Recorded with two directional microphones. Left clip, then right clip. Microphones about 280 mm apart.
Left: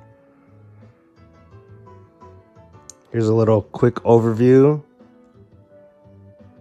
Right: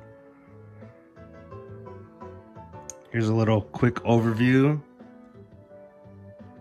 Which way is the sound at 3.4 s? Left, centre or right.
Left.